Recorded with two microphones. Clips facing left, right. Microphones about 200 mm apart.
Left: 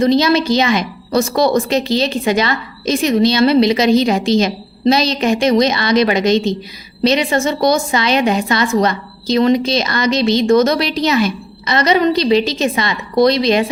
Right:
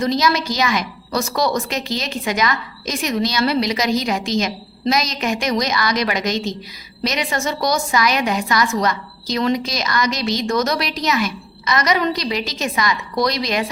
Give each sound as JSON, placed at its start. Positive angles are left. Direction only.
{"t": 0.0, "sound": "a woman's voice", "side_deg": 30}